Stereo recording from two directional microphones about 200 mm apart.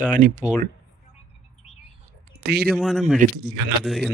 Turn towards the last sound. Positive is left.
turn(degrees=0)  # may be behind; listen again after turning